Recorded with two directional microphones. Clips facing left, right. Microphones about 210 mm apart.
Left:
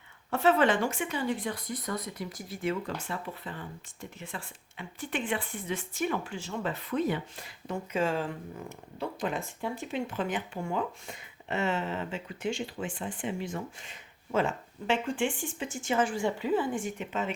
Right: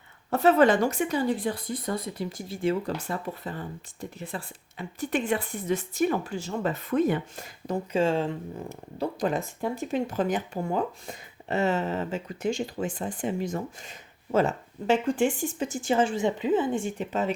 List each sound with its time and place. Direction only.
0.3 s speech: 40° right (ahead or behind)
7.9 s speech: 25° right (ahead or behind)
9.0 s speech: 40° right (ahead or behind)